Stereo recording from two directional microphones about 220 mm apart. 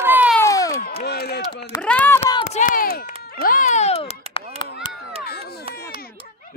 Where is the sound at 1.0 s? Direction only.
45° left (ahead or behind).